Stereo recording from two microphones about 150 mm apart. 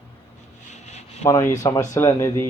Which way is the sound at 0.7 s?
50° left (ahead or behind).